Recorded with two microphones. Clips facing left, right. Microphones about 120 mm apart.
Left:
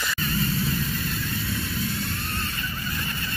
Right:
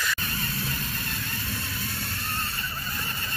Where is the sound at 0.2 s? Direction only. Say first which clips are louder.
Left 7 dB; 45° right (ahead or behind).